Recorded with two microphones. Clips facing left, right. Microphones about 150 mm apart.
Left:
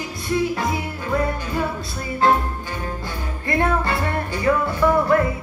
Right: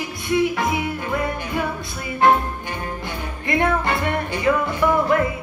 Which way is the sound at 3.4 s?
20° right (ahead or behind).